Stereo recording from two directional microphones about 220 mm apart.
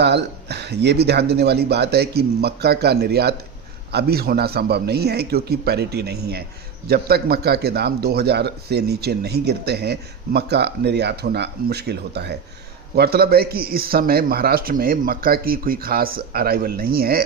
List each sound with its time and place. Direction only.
0.0 s a man's voice: 50° right (ahead or behind)